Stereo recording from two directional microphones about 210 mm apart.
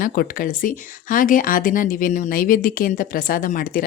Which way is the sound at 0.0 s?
40° left (ahead or behind).